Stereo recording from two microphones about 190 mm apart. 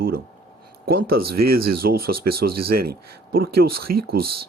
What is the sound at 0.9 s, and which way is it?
Speech, 55° right (ahead or behind).